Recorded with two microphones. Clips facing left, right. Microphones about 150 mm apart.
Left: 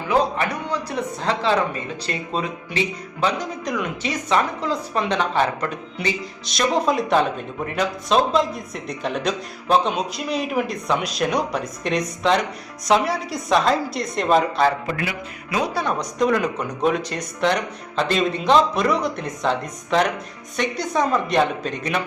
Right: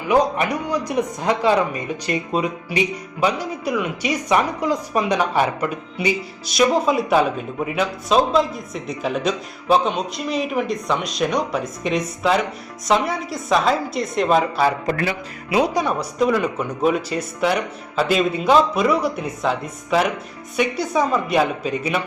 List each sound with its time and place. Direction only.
0.1 s a man's voice: 15° right (ahead or behind)
14.8 s speech: 40° right (ahead or behind)
15.4 s speech: 25° right (ahead or behind)
15.7 s a man's voice: 10° right (ahead or behind)